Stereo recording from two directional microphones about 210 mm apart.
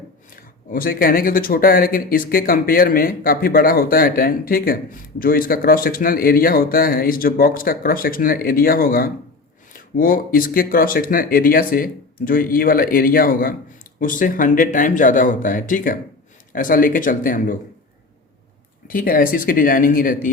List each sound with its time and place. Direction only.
0.3 s speech: 45° left (ahead or behind)
18.9 s speech: 45° left (ahead or behind)